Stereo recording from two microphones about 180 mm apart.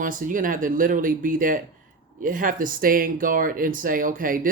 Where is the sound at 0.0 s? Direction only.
45° right (ahead or behind).